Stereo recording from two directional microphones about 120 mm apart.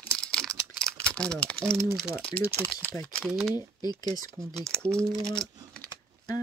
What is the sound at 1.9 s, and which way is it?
Speech, 5° right (ahead or behind).